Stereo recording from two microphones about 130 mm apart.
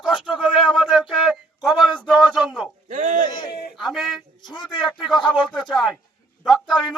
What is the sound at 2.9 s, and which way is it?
Speech, 70° right (ahead or behind).